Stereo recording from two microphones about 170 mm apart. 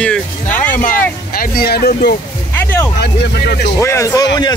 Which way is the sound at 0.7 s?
50° left (ahead or behind).